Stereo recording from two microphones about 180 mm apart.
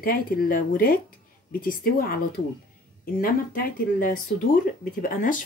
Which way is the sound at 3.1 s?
55° left (ahead or behind).